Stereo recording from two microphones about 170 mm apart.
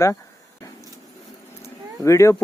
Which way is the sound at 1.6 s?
15° left (ahead or behind).